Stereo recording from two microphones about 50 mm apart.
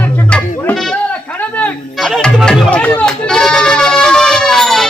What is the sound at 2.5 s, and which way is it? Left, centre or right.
Music, left.